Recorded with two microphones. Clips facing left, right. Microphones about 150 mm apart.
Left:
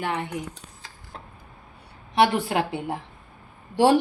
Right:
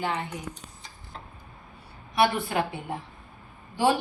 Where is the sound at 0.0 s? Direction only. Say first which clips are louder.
Left 2 dB; 75° left (ahead or behind).